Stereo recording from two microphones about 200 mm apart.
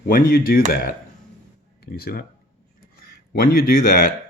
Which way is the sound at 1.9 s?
50° left (ahead or behind).